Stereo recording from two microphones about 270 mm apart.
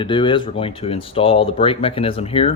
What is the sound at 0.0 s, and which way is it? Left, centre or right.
Speech, centre.